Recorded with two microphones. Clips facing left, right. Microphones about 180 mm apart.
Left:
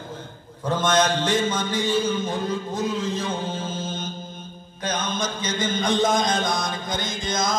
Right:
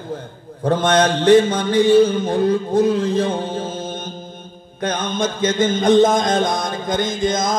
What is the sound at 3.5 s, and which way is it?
Music, 55° right (ahead or behind).